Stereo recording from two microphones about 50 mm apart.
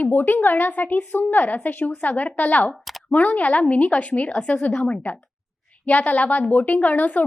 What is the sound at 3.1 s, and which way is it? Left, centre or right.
A woman's voice, left.